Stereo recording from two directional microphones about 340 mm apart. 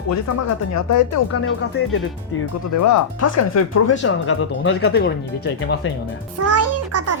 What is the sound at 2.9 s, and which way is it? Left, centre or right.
Speech, left.